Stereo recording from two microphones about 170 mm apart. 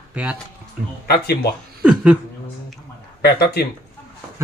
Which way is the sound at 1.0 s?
70° left (ahead or behind).